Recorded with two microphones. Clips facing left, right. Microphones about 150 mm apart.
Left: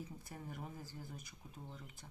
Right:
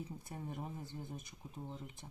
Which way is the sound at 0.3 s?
25° right (ahead or behind).